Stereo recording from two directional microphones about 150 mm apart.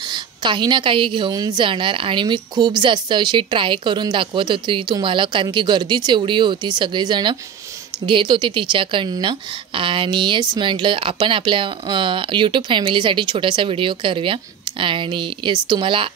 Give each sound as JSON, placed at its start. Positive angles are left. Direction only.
{"t": 0.1, "sound": "speech", "side_deg": -30}